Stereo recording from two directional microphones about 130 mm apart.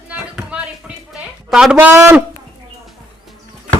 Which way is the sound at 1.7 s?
20° right (ahead or behind).